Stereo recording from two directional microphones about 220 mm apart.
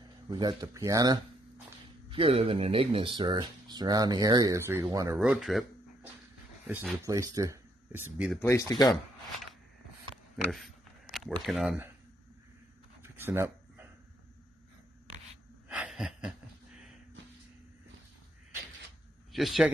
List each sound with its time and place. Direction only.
0.3 s speech: 20° right (ahead or behind)
5.2 s speech: centre (ahead or behind)
6.7 s speech: 5° right (ahead or behind)
7.1 s speech: 15° right (ahead or behind)
8.4 s speech: 15° left (ahead or behind)
10.3 s a sound: centre (ahead or behind)
11.4 s speech: 5° right (ahead or behind)
13.0 s a sound: 10° right (ahead or behind)
15.7 s a sound: 5° right (ahead or behind)
19.3 s speech: centre (ahead or behind)